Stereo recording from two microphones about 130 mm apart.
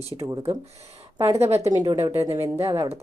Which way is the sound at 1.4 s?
50° right (ahead or behind).